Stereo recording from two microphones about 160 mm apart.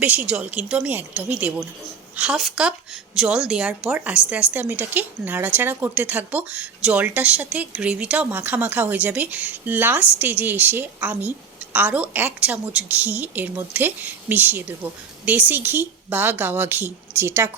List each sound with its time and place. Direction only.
0.0 s a woman's voice: 10° right (ahead or behind)